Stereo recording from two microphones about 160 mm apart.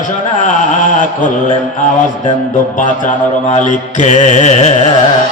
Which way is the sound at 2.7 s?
55° left (ahead or behind).